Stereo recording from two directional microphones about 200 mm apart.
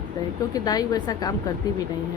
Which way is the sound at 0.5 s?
20° left (ahead or behind).